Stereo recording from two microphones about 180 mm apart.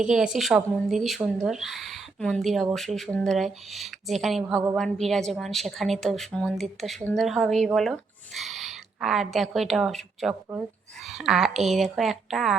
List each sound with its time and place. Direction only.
0.0 s a woman's voice: 5° right (ahead or behind)